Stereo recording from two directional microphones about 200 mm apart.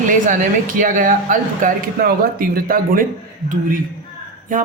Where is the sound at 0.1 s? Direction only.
40° right (ahead or behind).